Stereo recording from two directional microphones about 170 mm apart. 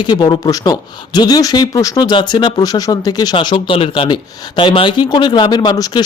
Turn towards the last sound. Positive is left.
turn(degrees=25)  # may be behind; listen again after turning